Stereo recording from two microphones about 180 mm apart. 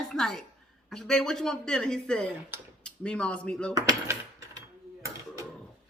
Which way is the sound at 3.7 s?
20° right (ahead or behind).